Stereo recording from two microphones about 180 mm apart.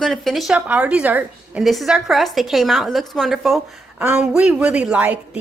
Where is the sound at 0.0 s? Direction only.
Centre (ahead or behind).